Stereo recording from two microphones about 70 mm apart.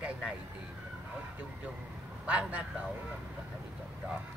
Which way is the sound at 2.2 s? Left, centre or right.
Centre.